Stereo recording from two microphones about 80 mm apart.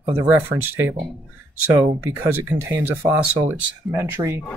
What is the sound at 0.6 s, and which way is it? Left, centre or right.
Speech, right.